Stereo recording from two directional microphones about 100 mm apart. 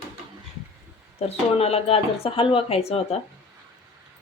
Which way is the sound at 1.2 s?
90° left.